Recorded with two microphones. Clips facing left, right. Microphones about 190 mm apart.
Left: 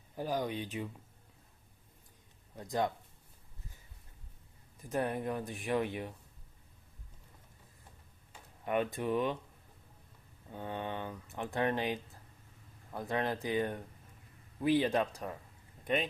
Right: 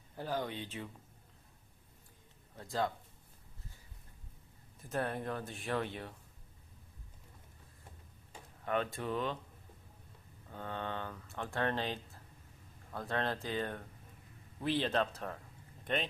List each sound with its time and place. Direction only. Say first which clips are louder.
0.2 s speech: left 3 dB; 15° left (ahead or behind)
2.6 s speech: left 2 dB; 20° left (ahead or behind)
4.8 s speech: left 3 dB; 15° left (ahead or behind)
8.6 s speech: left 3 dB; 15° left (ahead or behind)
10.5 s speech: left 2 dB; 15° left (ahead or behind)